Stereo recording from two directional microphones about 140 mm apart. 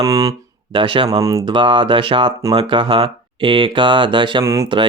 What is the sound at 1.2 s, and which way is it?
Speech, 25° right (ahead or behind).